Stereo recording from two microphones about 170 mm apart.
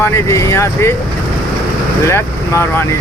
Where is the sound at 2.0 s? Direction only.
15° left (ahead or behind).